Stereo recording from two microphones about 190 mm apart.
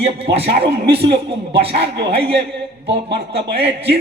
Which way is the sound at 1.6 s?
60° right (ahead or behind).